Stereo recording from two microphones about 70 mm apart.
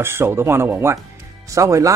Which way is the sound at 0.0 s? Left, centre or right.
Right.